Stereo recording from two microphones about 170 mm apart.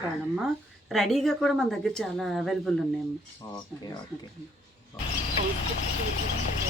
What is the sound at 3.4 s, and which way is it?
Speech, 25° left (ahead or behind).